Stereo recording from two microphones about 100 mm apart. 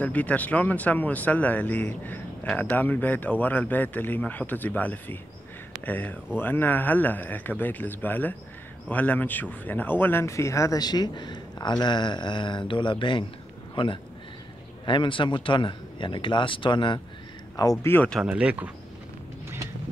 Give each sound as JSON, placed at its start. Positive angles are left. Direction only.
{"t": 0.0, "sound": "speech", "side_deg": 15}
{"t": 17.8, "sound": "speech", "side_deg": 20}
{"t": 18.2, "sound": "speech", "side_deg": -10}